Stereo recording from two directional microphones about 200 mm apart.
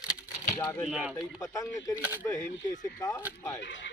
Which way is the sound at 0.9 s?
5° right (ahead or behind).